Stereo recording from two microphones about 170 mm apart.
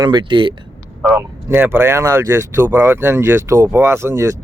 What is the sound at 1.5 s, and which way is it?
Speech, 10° right (ahead or behind).